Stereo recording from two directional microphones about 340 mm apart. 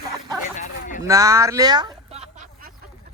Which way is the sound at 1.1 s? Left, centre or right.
Centre.